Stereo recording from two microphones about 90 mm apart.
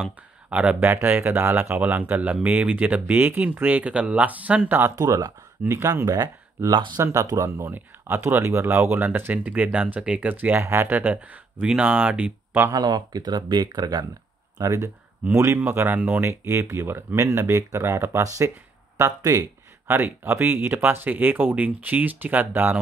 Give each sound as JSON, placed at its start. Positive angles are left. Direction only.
{"t": 0.5, "sound": "speech", "side_deg": -15}
{"t": 0.8, "sound": "speech", "side_deg": -25}
{"t": 5.0, "sound": "speech", "side_deg": -40}
{"t": 7.0, "sound": "speech", "side_deg": -30}
{"t": 10.6, "sound": "speech", "side_deg": -30}
{"t": 10.9, "sound": "speech", "side_deg": -20}
{"t": 12.7, "sound": "speech", "side_deg": -45}
{"t": 14.6, "sound": "speech", "side_deg": -35}
{"t": 16.2, "sound": "speech", "side_deg": -30}
{"t": 20.0, "sound": "speech", "side_deg": -25}